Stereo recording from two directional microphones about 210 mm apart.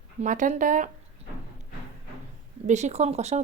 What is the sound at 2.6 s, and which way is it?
Speech, 35° right (ahead or behind).